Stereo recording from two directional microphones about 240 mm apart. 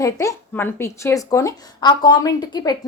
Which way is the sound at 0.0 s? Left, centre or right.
Centre.